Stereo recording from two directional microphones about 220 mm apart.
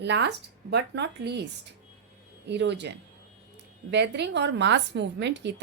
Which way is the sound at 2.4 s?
50° right (ahead or behind).